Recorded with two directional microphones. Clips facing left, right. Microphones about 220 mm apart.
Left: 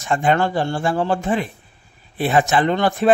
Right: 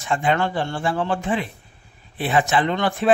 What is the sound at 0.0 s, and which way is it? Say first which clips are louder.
Speech: left 3 dB; 45° left (ahead or behind).